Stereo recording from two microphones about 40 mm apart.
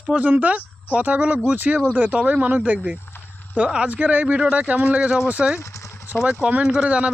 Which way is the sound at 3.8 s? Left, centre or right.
Right.